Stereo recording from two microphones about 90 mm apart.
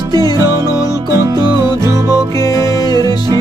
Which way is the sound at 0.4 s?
30° right (ahead or behind).